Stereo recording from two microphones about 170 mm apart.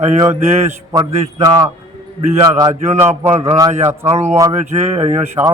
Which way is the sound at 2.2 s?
30° right (ahead or behind).